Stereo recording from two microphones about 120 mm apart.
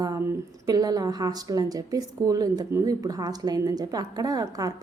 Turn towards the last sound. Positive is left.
turn(degrees=-30)  # may be behind; listen again after turning